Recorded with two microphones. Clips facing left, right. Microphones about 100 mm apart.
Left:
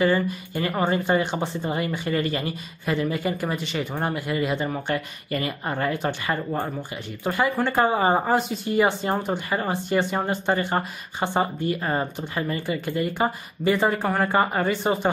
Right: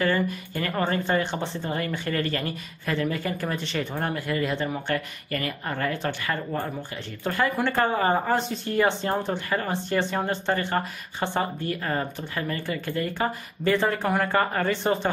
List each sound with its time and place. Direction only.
0.0 s speech: 15° left (ahead or behind)